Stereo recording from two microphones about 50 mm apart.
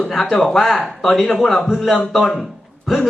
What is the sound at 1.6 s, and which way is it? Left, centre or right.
Speech, centre.